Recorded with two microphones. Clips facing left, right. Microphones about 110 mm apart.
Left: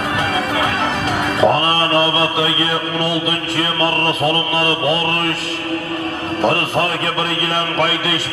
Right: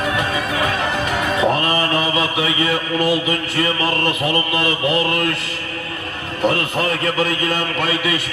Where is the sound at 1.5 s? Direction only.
30° left (ahead or behind).